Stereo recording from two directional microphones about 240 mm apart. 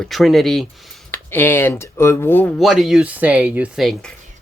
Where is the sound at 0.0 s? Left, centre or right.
Centre.